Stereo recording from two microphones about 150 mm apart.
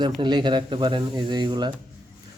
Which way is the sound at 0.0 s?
30° right (ahead or behind).